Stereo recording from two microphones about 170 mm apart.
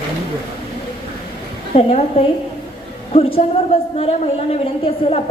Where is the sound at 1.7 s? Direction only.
35° left (ahead or behind).